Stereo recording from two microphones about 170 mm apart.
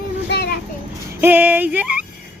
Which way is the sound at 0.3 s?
70° left (ahead or behind).